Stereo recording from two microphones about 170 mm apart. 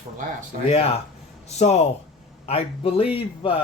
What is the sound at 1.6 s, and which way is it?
A man's voice, 40° left (ahead or behind).